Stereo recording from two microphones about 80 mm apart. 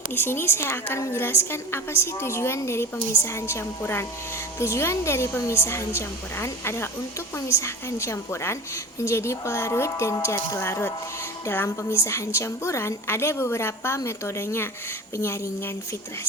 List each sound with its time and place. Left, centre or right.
0.1 s a woman's voice: left